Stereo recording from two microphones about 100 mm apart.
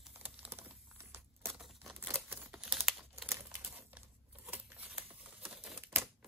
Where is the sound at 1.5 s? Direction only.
Centre (ahead or behind).